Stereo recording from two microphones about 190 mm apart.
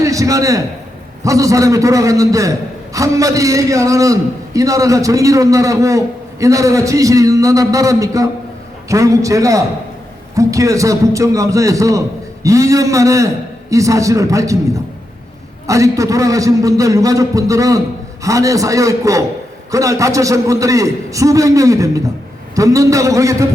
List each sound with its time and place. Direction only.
0.0 s a man's voice: 15° right (ahead or behind)
15.6 s a man's voice: 15° right (ahead or behind)